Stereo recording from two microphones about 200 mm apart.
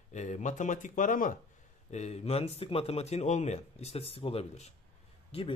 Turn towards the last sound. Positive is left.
turn(degrees=30)  # may be behind; listen again after turning